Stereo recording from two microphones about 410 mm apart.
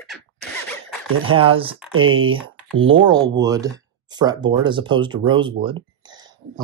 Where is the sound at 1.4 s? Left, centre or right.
Centre.